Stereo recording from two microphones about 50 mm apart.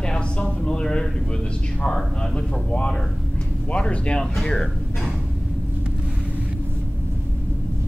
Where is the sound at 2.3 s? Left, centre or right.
Left.